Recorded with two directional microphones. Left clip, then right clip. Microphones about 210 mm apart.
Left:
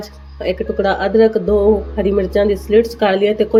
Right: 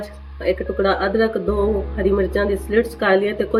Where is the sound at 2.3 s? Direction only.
30° left (ahead or behind).